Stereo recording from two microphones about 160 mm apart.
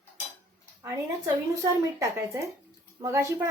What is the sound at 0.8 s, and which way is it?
Speech, 20° right (ahead or behind).